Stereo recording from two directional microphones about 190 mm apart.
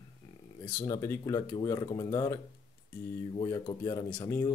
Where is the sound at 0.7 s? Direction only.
20° left (ahead or behind).